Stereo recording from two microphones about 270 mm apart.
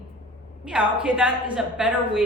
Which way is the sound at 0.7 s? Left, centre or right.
Centre.